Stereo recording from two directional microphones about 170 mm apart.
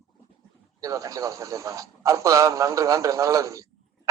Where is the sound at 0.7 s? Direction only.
20° right (ahead or behind).